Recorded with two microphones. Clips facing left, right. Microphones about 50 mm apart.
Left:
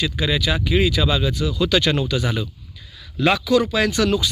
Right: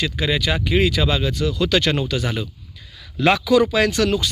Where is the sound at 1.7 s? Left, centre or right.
Right.